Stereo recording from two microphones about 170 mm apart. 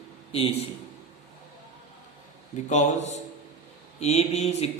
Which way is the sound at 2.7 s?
45° left (ahead or behind).